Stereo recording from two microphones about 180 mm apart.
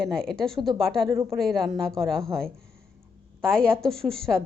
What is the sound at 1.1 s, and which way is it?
Speech, 15° right (ahead or behind).